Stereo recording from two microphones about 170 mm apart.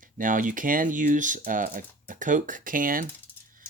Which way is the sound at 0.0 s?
50° right (ahead or behind).